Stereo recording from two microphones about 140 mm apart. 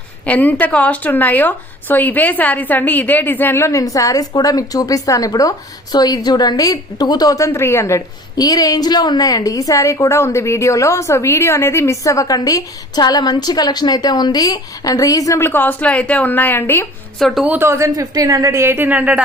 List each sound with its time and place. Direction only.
0.3 s speech: 10° left (ahead or behind)
17.2 s a woman's voice: centre (ahead or behind)
17.5 s a woman's voice: 15° right (ahead or behind)